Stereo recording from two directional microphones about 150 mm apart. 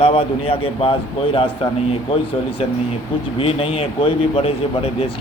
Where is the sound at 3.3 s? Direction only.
40° left (ahead or behind).